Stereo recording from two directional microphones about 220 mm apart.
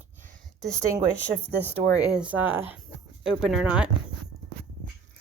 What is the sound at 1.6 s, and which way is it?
Speech, 5° right (ahead or behind).